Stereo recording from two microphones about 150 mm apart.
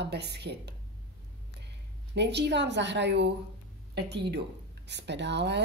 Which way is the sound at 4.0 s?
90° right.